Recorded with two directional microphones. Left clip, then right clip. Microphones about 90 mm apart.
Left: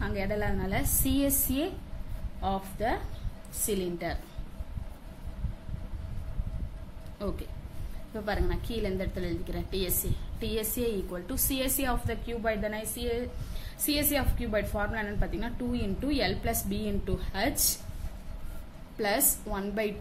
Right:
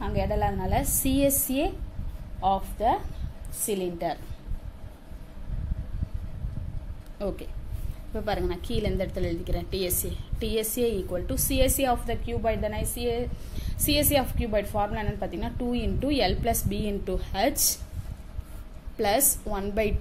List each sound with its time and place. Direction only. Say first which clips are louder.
0.0 s a woman's voice: right 5 dB; 40° right (ahead or behind)
2.4 s a woman's voice: right 7 dB; 30° right (ahead or behind)
8.1 s a woman's voice: right 4 dB; 45° right (ahead or behind)
11.1 s a woman's voice: right 5 dB; 40° right (ahead or behind); by 17.7 s 55° right (ahead or behind)
18.9 s a woman's voice: right 4 dB; 55° right (ahead or behind)